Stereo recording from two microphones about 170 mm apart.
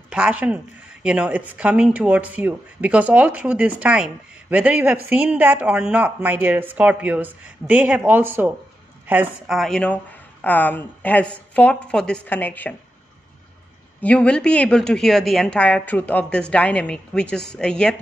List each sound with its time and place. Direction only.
0.1 s speech: 5° right (ahead or behind)
9.6 s a woman's voice: 5° left (ahead or behind)
14.0 s a woman's voice: 5° left (ahead or behind)